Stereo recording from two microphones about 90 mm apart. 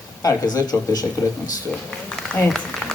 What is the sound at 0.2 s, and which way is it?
Speech, 40° left (ahead or behind).